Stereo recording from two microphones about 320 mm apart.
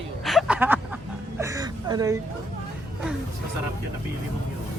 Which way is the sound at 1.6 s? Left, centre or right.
Centre.